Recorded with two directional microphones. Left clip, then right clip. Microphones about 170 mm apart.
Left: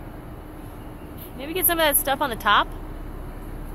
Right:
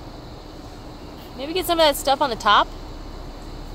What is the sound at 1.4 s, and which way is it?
Speech, 30° right (ahead or behind).